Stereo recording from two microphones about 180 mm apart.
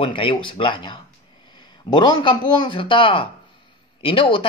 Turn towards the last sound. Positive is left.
turn(degrees=30)  # may be behind; listen again after turning